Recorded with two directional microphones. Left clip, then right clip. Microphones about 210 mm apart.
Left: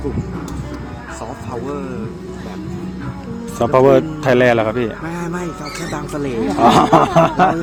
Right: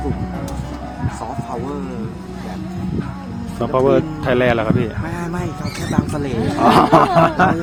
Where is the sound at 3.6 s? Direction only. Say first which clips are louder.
Left 4 dB; 30° left (ahead or behind).